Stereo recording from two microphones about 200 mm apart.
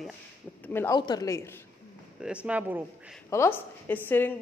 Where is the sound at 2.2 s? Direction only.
5° right (ahead or behind).